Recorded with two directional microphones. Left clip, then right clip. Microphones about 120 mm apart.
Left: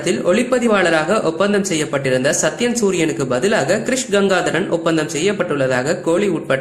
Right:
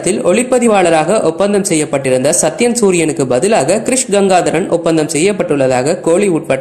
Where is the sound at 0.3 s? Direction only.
35° right (ahead or behind).